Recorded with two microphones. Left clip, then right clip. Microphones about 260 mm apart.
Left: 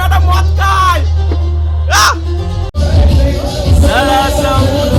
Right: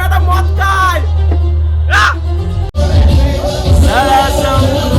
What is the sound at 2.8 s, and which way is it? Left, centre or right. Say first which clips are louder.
Music: even; centre.